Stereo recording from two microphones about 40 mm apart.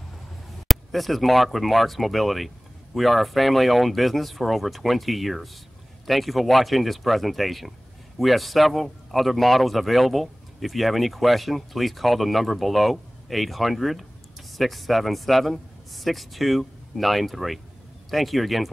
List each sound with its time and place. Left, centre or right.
0.7 s a man's voice: centre